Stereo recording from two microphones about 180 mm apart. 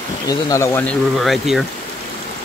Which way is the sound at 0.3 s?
15° left (ahead or behind).